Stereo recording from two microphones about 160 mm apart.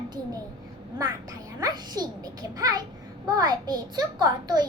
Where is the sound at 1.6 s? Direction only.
25° right (ahead or behind).